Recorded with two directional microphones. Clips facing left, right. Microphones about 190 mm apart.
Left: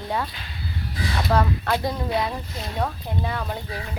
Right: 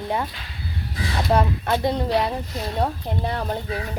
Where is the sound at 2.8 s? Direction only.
35° right (ahead or behind).